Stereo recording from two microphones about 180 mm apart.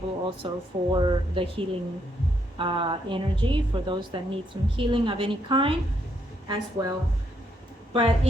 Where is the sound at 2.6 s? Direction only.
30° right (ahead or behind).